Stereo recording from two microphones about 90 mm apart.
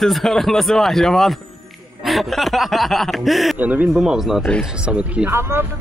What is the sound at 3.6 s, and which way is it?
Speech, 20° right (ahead or behind).